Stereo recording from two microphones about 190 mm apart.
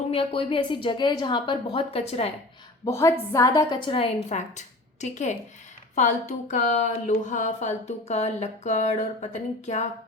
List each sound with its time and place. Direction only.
0.1 s a woman's voice: 30° left (ahead or behind)
2.8 s a woman's voice: 15° left (ahead or behind); by 9.9 s 40° left (ahead or behind)